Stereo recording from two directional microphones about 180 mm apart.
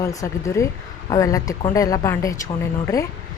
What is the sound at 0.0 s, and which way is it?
Speech, 20° left (ahead or behind).